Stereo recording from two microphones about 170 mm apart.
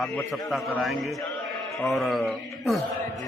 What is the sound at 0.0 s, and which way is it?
A man's voice, 5° left (ahead or behind).